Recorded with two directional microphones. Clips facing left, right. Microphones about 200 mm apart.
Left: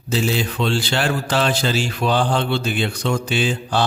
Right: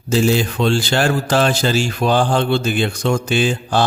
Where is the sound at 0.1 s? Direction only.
45° right (ahead or behind).